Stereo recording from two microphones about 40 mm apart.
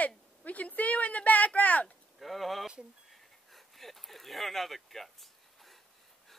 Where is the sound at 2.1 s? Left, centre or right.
Centre.